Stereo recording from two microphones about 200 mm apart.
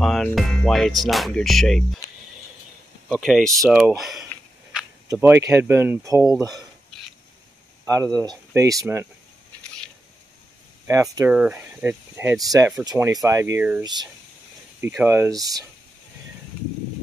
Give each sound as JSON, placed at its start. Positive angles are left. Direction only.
{"t": 0.0, "sound": "speech", "side_deg": 0}
{"t": 3.1, "sound": "speech", "side_deg": -5}
{"t": 7.8, "sound": "speech", "side_deg": -15}
{"t": 10.9, "sound": "speech", "side_deg": -15}
{"t": 13.8, "sound": "speech", "side_deg": -20}
{"t": 15.3, "sound": "speech", "side_deg": -20}